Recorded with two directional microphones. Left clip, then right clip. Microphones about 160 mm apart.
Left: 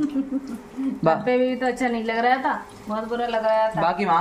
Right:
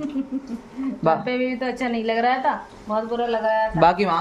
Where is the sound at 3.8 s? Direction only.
90° right.